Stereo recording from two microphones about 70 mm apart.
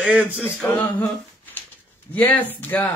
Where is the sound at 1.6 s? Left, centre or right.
Left.